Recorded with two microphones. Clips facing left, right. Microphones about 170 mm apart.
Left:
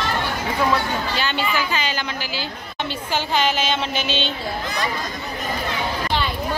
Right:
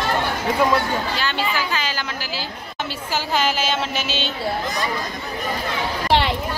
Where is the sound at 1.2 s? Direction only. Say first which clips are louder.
Left 1 dB; centre (ahead or behind).